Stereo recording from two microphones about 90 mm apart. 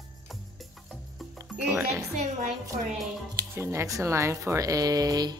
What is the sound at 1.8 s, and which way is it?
Speech, 35° right (ahead or behind).